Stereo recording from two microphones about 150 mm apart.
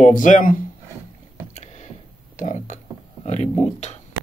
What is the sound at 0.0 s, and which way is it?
Speech, 55° left (ahead or behind).